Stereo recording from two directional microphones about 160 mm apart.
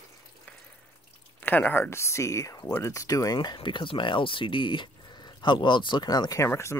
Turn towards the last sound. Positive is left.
turn(degrees=15)  # may be behind; listen again after turning